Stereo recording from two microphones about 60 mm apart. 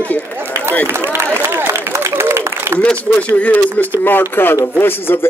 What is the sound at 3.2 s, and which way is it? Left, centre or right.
A man's voice, left.